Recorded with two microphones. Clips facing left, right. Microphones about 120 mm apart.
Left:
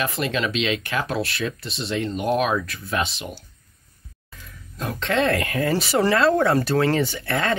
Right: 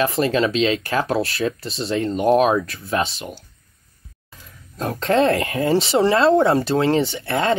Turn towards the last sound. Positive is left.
turn(degrees=-25)  # may be behind; listen again after turning